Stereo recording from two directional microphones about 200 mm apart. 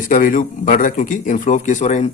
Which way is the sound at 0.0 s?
40° left (ahead or behind).